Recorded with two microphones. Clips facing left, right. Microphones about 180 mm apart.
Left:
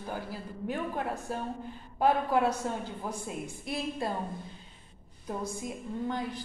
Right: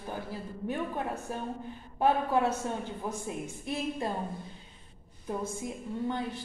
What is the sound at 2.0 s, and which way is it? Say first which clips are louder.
Speech: even; 20° right (ahead or behind).